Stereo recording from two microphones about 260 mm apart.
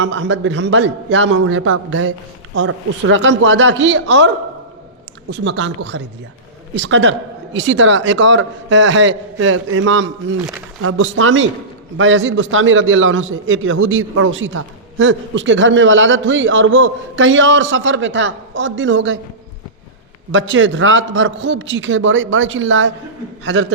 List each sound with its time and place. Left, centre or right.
0.0 s a man's voice: right
5.3 s a man's voice: right
20.3 s a man's voice: right